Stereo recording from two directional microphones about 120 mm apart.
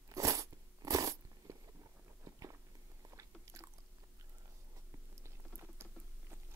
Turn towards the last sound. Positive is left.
turn(degrees=-20)  # may be behind; listen again after turning